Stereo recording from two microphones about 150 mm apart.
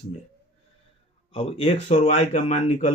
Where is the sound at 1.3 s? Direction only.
40° left (ahead or behind).